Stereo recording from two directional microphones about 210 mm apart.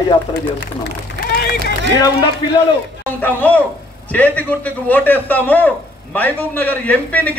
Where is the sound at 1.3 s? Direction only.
45° left (ahead or behind).